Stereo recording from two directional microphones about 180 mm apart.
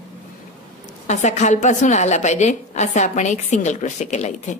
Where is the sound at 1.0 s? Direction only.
40° left (ahead or behind).